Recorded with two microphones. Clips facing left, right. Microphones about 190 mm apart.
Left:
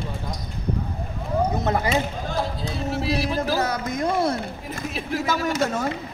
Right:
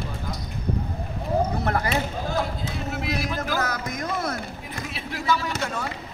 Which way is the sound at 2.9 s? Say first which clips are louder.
Left 5 dB; 30° left (ahead or behind).